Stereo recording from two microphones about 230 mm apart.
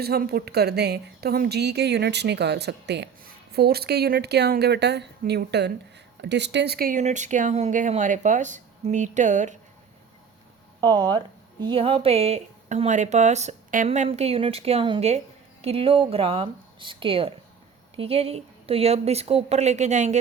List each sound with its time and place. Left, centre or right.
0.0 s a woman's voice: right
10.8 s speech: centre